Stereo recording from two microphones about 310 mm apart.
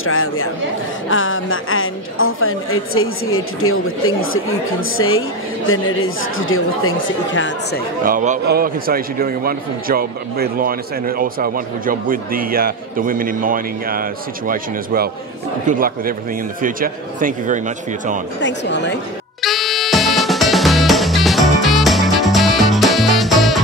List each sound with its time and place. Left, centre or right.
0.0 s a woman's voice: left
8.0 s a man's voice: right
18.4 s a woman's voice: left
19.4 s music: centre